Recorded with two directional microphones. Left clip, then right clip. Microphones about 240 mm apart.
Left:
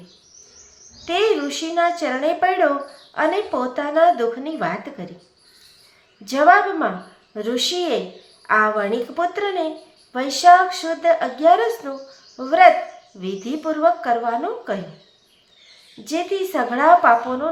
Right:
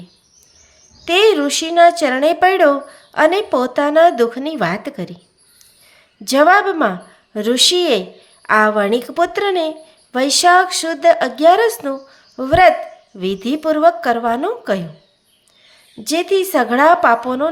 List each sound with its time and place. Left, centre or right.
1.0 s speech: right
6.2 s speech: right
16.0 s speech: right